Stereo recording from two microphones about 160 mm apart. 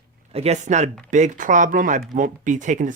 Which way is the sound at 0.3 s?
40° right (ahead or behind).